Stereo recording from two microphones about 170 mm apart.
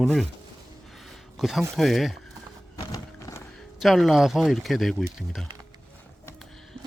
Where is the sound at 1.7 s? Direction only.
Centre (ahead or behind).